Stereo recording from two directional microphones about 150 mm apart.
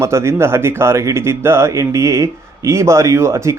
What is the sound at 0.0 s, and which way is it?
Speech, 20° right (ahead or behind).